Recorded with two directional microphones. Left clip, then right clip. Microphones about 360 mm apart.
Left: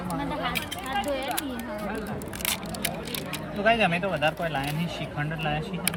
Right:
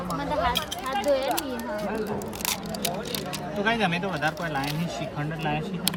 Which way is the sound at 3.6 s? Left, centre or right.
Centre.